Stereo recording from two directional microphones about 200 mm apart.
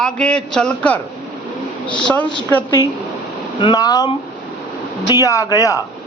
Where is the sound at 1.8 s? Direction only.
25° left (ahead or behind).